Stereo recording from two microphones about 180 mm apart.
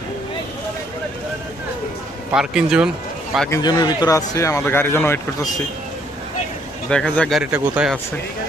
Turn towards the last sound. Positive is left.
turn(degrees=-5)  # may be behind; listen again after turning